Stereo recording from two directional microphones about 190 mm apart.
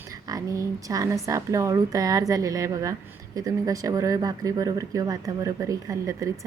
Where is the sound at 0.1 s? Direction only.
20° right (ahead or behind).